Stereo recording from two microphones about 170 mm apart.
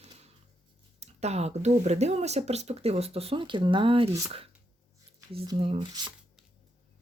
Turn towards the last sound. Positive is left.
turn(degrees=-30)  # may be behind; listen again after turning